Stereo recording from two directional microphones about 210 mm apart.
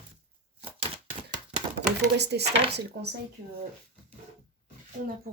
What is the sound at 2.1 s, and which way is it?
Speech, 50° right (ahead or behind).